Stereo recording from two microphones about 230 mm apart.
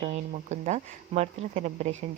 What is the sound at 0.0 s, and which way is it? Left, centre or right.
Speech, right.